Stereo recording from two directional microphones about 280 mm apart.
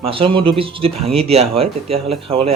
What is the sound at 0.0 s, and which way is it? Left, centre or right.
Speech, centre.